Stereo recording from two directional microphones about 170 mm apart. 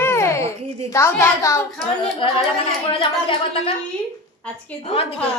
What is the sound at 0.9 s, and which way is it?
Speech, 15° left (ahead or behind).